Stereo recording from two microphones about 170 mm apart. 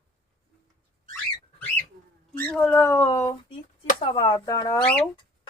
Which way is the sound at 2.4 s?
10° left (ahead or behind).